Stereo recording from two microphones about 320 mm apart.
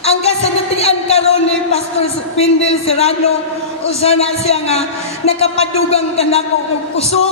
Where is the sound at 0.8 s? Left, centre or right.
Centre.